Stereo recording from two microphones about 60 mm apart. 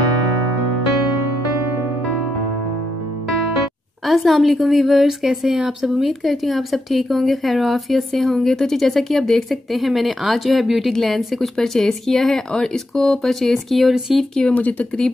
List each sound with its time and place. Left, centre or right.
4.0 s a woman's voice: centre
14.5 s speech: left